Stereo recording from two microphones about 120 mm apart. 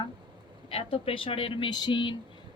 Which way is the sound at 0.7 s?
55° left (ahead or behind).